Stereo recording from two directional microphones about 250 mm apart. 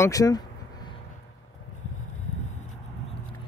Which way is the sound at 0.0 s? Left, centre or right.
Centre.